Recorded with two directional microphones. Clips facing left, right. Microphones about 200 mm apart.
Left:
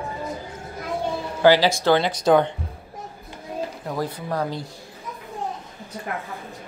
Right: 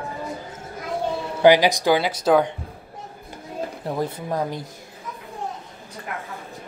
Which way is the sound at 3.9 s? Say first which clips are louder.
Right 2 dB; 20° right (ahead or behind).